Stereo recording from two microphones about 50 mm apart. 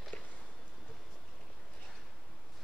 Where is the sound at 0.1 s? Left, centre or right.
Left.